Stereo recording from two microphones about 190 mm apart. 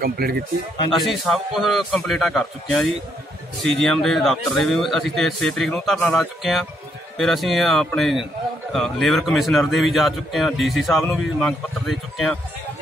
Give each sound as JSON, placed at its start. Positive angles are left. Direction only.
{"t": 0.0, "sound": "speech", "side_deg": -55}
{"t": 0.9, "sound": "speech", "side_deg": 0}